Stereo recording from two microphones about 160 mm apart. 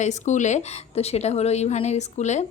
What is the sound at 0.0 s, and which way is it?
A woman's voice, 50° left (ahead or behind).